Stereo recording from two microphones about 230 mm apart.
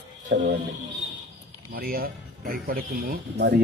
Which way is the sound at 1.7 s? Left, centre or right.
Right.